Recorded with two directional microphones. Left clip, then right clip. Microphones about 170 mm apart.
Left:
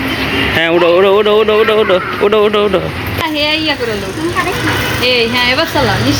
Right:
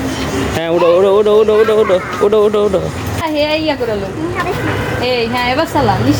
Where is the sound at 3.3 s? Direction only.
80° right.